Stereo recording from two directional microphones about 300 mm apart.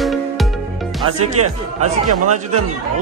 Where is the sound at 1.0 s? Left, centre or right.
Right.